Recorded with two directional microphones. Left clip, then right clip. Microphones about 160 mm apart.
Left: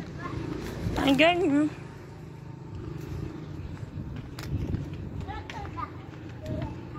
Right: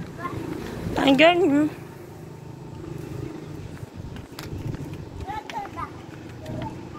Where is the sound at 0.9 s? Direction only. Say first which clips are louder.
Right 6 dB; 25° right (ahead or behind).